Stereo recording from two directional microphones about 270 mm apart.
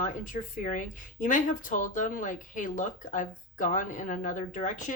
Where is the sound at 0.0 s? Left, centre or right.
Left.